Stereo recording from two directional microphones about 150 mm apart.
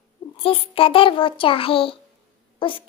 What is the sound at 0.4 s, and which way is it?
A child's voice, 35° left (ahead or behind).